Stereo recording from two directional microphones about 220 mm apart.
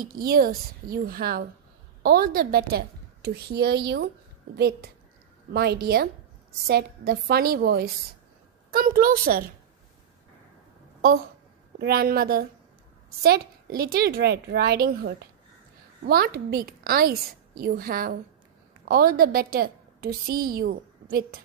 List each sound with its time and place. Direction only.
0.0 s a woman's voice: 40° right (ahead or behind)
11.8 s a woman's voice: 45° right (ahead or behind)